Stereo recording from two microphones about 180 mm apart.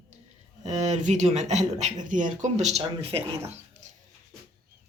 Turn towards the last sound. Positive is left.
turn(degrees=-30)  # may be behind; listen again after turning